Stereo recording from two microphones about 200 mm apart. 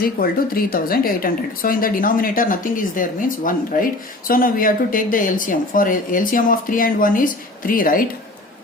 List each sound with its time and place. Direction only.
0.0 s a woman's voice: 45° left (ahead or behind)